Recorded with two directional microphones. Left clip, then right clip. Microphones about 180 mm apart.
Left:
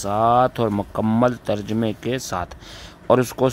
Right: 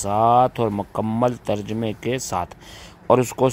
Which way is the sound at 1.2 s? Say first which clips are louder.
Right 1 dB; 5° left (ahead or behind).